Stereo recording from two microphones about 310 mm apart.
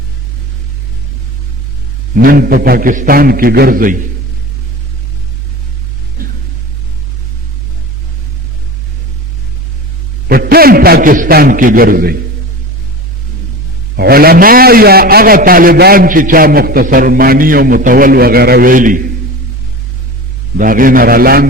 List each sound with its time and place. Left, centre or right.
2.2 s a man's voice: right
6.2 s a sound: right
10.2 s a man's voice: right
13.9 s a man's voice: right
20.6 s a man's voice: right